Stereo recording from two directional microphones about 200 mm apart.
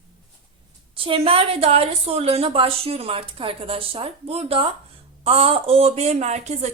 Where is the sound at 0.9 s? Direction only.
25° right (ahead or behind).